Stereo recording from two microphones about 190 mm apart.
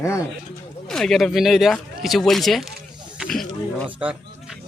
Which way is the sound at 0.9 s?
Centre (ahead or behind).